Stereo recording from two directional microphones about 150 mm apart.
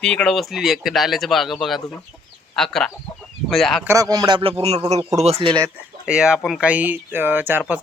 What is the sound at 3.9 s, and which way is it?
Speech, 25° right (ahead or behind).